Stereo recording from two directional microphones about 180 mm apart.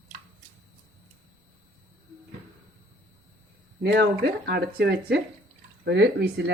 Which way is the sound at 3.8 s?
60° right (ahead or behind).